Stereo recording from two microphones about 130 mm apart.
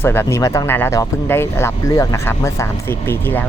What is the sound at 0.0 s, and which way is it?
Speech, 20° left (ahead or behind).